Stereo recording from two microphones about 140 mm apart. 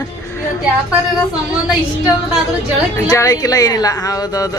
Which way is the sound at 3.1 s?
25° left (ahead or behind).